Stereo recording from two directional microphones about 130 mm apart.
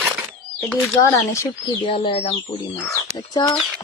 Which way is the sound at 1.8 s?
45° left (ahead or behind).